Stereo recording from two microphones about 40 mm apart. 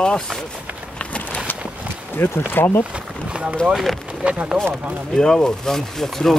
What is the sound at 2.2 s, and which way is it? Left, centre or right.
Speech, left.